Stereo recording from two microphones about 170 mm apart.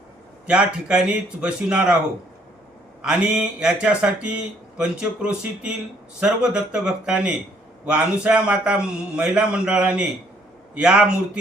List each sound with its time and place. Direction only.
0.4 s a man's voice: 5° right (ahead or behind)
3.0 s a man's voice: 5° right (ahead or behind)